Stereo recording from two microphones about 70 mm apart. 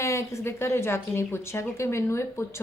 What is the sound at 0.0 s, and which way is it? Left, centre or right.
A woman's voice, left.